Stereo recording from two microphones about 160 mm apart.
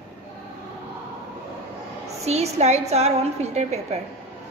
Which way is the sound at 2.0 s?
40° right (ahead or behind).